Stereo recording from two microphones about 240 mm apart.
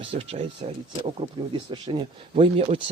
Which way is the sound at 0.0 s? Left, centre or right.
Right.